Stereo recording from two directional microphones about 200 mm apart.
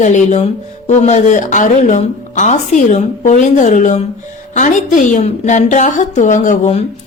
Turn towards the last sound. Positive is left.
turn(degrees=35)  # may be behind; listen again after turning